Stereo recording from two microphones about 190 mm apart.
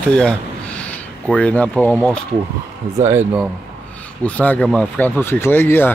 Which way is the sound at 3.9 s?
5° left (ahead or behind).